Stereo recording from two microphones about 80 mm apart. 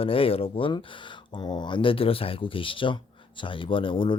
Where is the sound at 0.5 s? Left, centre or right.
Left.